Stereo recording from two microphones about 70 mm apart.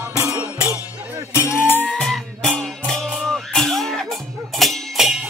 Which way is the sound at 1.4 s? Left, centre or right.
Left.